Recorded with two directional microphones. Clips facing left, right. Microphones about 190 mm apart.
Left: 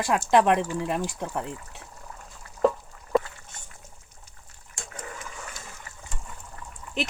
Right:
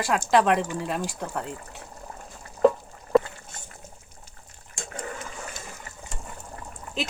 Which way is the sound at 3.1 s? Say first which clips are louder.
Right 4 dB; centre (ahead or behind).